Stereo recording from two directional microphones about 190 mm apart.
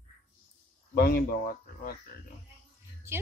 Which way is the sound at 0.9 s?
55° left (ahead or behind).